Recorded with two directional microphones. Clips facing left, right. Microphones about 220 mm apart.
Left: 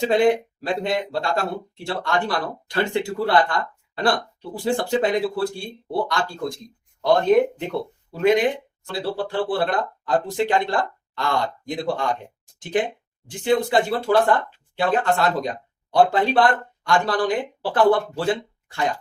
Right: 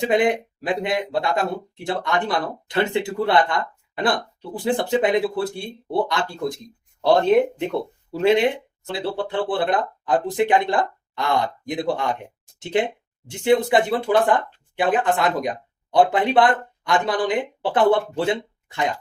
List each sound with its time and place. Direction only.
0.1 s speech: 20° right (ahead or behind)
8.2 s speech: 30° right (ahead or behind)